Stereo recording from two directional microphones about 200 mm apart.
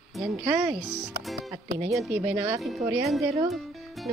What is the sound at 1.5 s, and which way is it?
Speech, 15° right (ahead or behind).